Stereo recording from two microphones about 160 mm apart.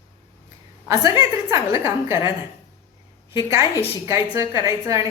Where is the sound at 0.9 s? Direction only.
20° right (ahead or behind).